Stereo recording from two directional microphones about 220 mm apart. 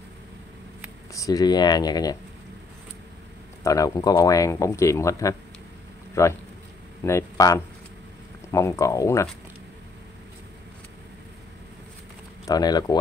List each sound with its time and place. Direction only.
1.1 s speech: 15° left (ahead or behind)
3.6 s speech: 15° left (ahead or behind)
12.4 s speech: 15° left (ahead or behind)